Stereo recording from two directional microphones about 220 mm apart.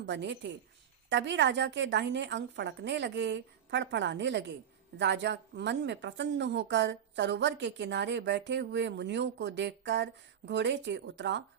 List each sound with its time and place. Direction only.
0.0 s a woman's voice: 50° right (ahead or behind)